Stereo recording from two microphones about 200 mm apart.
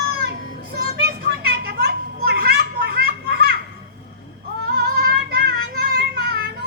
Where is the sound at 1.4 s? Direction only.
50° right (ahead or behind).